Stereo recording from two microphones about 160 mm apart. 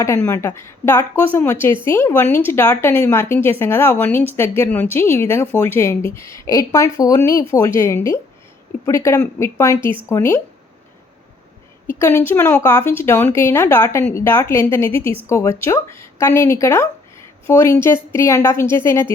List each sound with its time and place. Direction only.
0.3 s a woman's voice: 15° left (ahead or behind)
11.9 s a woman's voice: 15° left (ahead or behind)